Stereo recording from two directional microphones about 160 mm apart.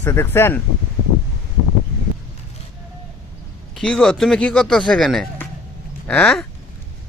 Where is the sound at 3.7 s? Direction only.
5° left (ahead or behind).